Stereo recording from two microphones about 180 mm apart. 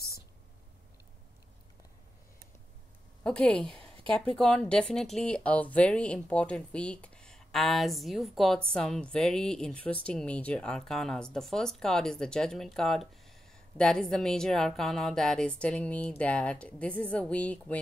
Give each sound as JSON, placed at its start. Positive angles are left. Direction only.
{"t": 3.3, "sound": "a woman's voice", "side_deg": 5}